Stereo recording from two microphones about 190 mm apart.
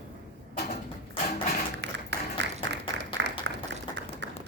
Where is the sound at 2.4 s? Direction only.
70° right (ahead or behind).